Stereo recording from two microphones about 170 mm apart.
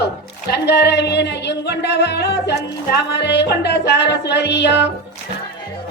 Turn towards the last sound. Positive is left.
turn(degrees=90)